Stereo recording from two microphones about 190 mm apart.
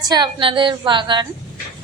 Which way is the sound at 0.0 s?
20° right (ahead or behind).